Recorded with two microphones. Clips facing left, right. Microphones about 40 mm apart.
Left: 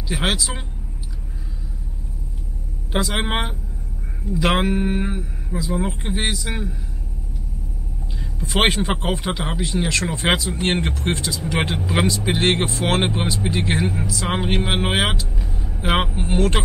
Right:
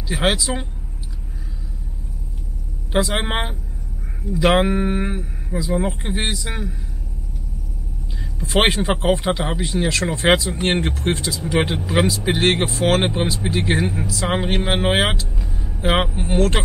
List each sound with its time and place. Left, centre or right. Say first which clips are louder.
0.1 s speech: right 3 dB; centre
2.9 s speech: right 2 dB; centre
8.4 s speech: right 1 dB; centre